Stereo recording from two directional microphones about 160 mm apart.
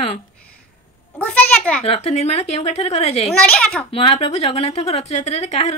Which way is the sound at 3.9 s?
35° left (ahead or behind).